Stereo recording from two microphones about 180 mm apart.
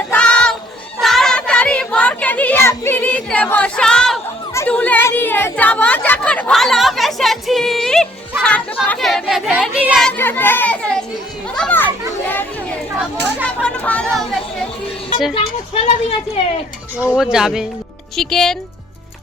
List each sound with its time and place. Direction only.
0.1 s a sound: 5° left (ahead or behind)
1.0 s child singing: centre (ahead or behind)
4.5 s a sound: 10° left (ahead or behind)
8.4 s children playing: 5° left (ahead or behind)
10.0 s children playing: 10° left (ahead or behind)
13.4 s chatter: 5° left (ahead or behind)
15.4 s speech: 35° left (ahead or behind)
17.2 s speech: centre (ahead or behind)